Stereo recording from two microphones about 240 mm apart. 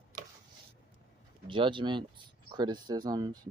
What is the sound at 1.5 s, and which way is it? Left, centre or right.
Speech, right.